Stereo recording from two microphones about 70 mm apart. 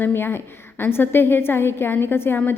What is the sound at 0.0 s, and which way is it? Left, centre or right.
A woman's voice, left.